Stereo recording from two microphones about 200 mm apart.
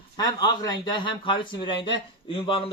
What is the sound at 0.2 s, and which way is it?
Speech, 20° left (ahead or behind).